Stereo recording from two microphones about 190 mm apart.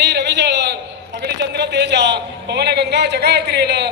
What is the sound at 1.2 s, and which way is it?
A man's voice, 60° right (ahead or behind).